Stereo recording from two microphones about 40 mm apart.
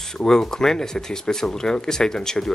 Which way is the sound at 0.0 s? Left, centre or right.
Centre.